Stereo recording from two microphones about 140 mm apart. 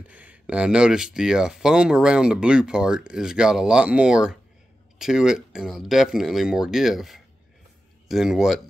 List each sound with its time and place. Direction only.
0.1 s speech: 10° right (ahead or behind)